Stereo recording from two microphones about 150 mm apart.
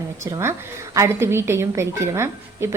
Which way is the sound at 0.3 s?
20° right (ahead or behind).